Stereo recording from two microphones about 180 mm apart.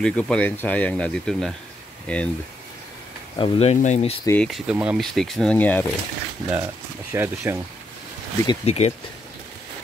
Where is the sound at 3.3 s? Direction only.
30° left (ahead or behind).